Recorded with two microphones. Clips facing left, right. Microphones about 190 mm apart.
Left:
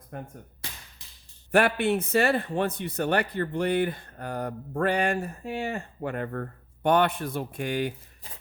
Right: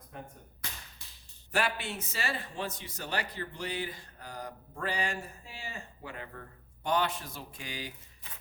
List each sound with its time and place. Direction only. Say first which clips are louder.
0.1 s speech: left 7 dB; 60° left (ahead or behind)
1.5 s speech: left 10 dB; 60° left (ahead or behind)